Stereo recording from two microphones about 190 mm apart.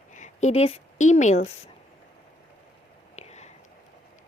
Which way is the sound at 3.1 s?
35° left (ahead or behind).